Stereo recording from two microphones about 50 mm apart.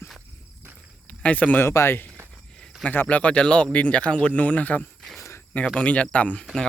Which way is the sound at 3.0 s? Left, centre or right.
Left.